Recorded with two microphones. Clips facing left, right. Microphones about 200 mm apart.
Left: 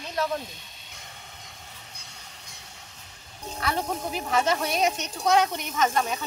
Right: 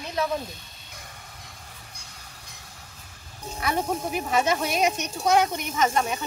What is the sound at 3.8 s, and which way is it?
Speech, 5° right (ahead or behind).